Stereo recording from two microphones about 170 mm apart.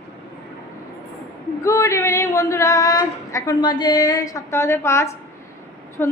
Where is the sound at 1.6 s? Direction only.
15° left (ahead or behind).